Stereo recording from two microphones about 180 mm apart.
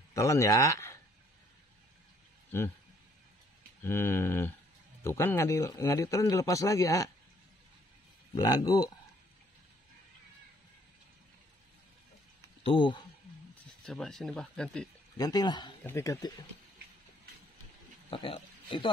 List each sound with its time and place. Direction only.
0.1 s speech: 15° left (ahead or behind)
3.8 s a man's voice: 15° left (ahead or behind)
8.4 s speech: 20° left (ahead or behind)
12.6 s speech: 25° left (ahead or behind)
13.8 s speech: centre (ahead or behind)
15.1 s a man's voice: 20° left (ahead or behind)
18.1 s speech: 30° left (ahead or behind)